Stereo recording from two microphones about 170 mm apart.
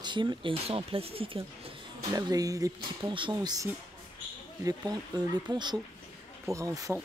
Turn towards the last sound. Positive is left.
turn(degrees=-20)  # may be behind; listen again after turning